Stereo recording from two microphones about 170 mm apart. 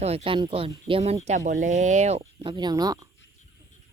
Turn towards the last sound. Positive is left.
turn(degrees=-20)  # may be behind; listen again after turning